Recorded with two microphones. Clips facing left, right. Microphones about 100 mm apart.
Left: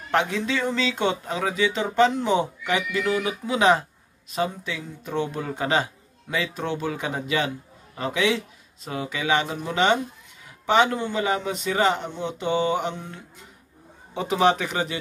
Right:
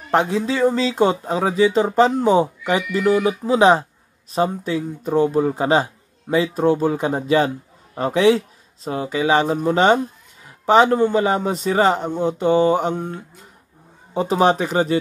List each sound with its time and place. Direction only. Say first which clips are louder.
0.1 s speech: right 5 dB; 35° right (ahead or behind)